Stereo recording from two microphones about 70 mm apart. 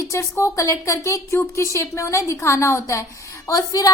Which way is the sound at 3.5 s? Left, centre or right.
Left.